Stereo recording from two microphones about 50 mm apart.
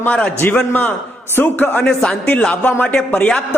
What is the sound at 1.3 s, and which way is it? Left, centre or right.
Speech, left.